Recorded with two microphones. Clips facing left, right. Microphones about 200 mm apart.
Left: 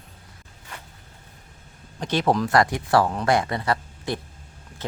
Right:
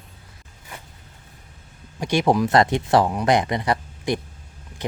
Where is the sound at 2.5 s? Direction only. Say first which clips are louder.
Right 2 dB; 25° right (ahead or behind).